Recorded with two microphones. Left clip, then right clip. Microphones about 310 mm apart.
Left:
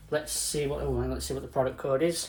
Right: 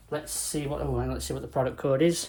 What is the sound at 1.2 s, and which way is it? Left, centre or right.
Speech, right.